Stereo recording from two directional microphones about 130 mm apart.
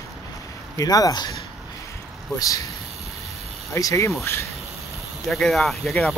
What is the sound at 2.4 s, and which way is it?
Speech, 25° left (ahead or behind).